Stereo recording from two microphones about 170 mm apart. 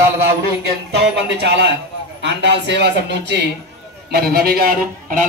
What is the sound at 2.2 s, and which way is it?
A man's voice, 90° right.